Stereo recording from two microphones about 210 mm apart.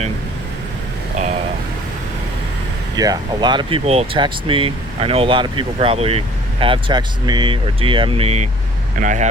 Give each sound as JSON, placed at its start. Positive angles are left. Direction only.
{"t": 2.9, "sound": "speech", "side_deg": -20}